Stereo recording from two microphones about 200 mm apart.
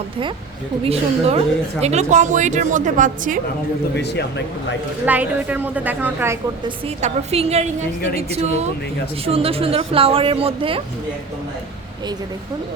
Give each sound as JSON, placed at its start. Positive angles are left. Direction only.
{"t": 0.9, "sound": "a woman's voice", "side_deg": -30}
{"t": 3.9, "sound": "speech", "side_deg": 55}
{"t": 5.0, "sound": "a woman's voice", "side_deg": -10}
{"t": 6.8, "sound": "a woman's voice", "side_deg": -30}
{"t": 9.2, "sound": "speech", "side_deg": -30}